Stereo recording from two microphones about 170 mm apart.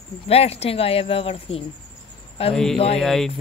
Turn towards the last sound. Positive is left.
turn(degrees=5)  # may be behind; listen again after turning